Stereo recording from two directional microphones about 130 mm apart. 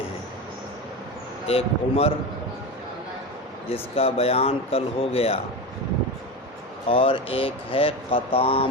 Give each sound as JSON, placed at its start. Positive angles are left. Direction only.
{"t": 1.5, "sound": "speech", "side_deg": 50}
{"t": 3.7, "sound": "speech", "side_deg": 50}
{"t": 6.8, "sound": "speech", "side_deg": 45}